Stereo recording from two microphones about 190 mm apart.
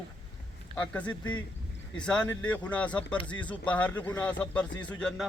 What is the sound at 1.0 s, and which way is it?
Speech, 25° left (ahead or behind).